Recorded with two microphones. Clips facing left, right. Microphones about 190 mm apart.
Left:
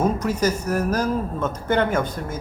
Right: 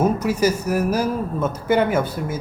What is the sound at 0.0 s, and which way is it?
A man's voice, 10° right (ahead or behind).